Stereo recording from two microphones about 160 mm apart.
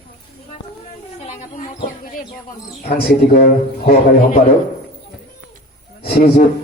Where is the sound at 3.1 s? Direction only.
70° left (ahead or behind).